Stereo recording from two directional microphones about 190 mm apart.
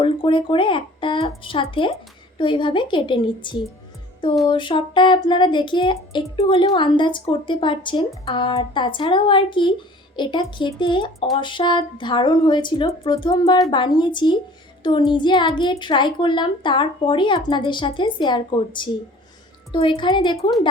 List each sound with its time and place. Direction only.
0.0 s speech: 25° left (ahead or behind)